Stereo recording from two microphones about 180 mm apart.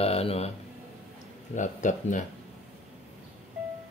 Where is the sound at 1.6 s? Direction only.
45° left (ahead or behind).